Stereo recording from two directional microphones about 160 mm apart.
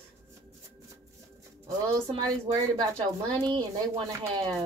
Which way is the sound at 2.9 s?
30° right (ahead or behind).